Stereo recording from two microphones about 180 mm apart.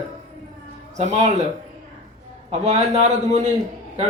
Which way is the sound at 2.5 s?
40° right (ahead or behind).